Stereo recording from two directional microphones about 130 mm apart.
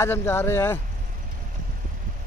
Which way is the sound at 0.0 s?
20° left (ahead or behind).